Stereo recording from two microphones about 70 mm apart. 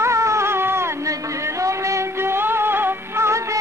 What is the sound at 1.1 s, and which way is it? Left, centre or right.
Music, right.